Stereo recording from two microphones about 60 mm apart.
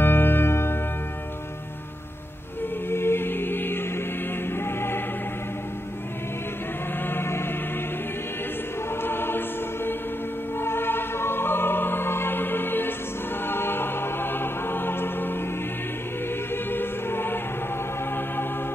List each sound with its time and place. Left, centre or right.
0.0 s music: left
2.9 s music: left
7.0 s a sound: left
9.0 s choir: left
10.6 s music: left
16.7 s music: left